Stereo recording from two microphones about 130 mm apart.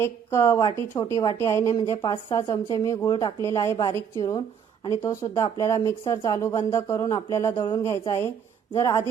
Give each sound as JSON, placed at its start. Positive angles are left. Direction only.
{"t": 0.0, "sound": "speech", "side_deg": 20}
{"t": 3.4, "sound": "speech", "side_deg": 20}
{"t": 7.5, "sound": "speech", "side_deg": 35}
{"t": 7.9, "sound": "speech", "side_deg": 20}